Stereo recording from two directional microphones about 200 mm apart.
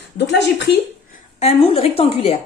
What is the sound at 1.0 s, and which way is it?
A woman's voice, 35° left (ahead or behind).